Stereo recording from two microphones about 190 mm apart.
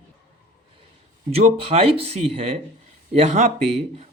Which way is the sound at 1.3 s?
30° right (ahead or behind).